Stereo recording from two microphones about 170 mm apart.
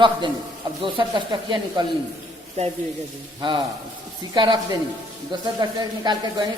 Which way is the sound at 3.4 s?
25° right (ahead or behind).